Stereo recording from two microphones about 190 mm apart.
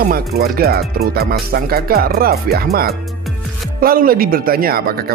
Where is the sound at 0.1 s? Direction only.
55° right (ahead or behind).